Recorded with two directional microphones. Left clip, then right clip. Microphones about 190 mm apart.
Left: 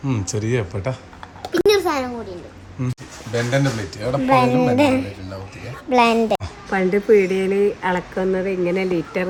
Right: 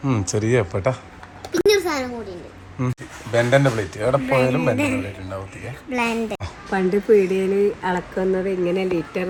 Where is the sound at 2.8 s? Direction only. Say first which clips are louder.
Right 2 dB; 10° left (ahead or behind).